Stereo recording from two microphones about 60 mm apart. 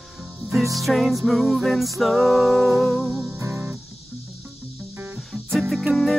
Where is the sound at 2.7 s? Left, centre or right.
Right.